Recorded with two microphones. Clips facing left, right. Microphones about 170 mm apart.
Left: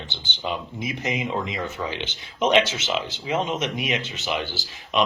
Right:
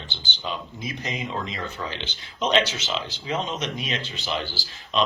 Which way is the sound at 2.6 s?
25° left (ahead or behind).